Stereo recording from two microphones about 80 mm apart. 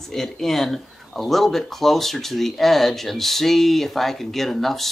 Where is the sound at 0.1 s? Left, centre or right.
Centre.